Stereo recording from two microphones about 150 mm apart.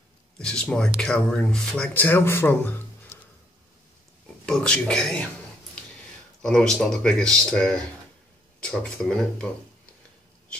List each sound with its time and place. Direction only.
0.4 s speech: 5° left (ahead or behind)
4.5 s speech: 5° left (ahead or behind)
6.4 s speech: 5° left (ahead or behind)